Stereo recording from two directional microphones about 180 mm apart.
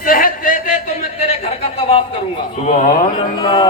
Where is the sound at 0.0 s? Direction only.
50° left (ahead or behind).